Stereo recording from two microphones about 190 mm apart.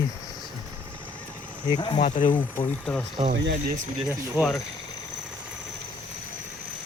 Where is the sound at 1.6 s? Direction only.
25° left (ahead or behind).